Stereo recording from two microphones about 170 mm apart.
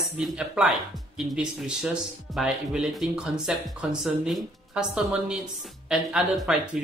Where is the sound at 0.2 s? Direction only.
5° right (ahead or behind).